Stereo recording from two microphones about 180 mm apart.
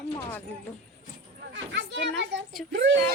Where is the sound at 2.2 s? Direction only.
80° right.